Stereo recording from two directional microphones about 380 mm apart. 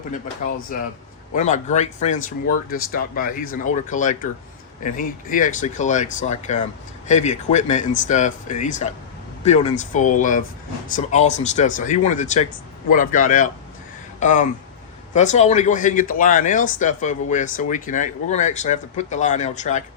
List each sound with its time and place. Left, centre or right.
1.3 s speech: centre